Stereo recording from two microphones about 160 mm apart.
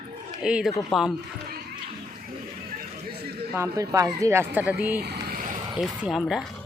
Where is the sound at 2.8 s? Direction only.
75° right (ahead or behind).